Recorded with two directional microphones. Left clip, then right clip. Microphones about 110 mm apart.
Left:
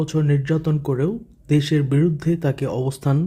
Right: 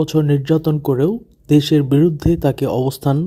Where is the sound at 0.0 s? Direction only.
35° right (ahead or behind).